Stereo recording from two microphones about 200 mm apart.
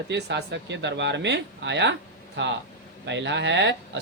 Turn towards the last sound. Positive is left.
turn(degrees=-60)  # may be behind; listen again after turning